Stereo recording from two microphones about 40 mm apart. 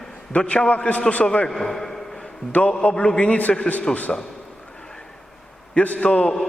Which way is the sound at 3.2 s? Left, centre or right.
Left.